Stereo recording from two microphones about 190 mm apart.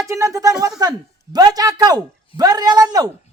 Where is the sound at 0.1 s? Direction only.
15° right (ahead or behind).